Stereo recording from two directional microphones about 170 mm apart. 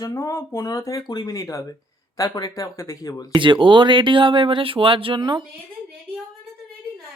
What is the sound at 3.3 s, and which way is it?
Speech, 30° right (ahead or behind).